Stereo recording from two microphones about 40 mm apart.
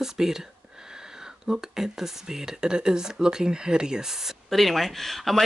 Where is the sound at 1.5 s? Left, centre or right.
Centre.